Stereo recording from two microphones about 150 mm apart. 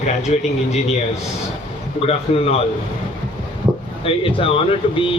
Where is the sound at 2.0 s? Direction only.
40° left (ahead or behind).